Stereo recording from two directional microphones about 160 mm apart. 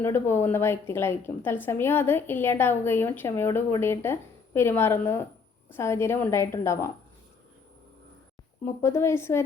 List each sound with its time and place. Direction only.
0.0 s a woman's voice: 15° left (ahead or behind)
8.6 s a woman's voice: 15° left (ahead or behind)